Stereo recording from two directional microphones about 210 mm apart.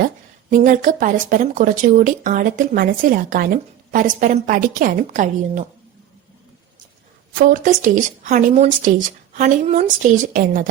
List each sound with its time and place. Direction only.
0.5 s speech: 40° right (ahead or behind)
7.3 s speech: 40° right (ahead or behind)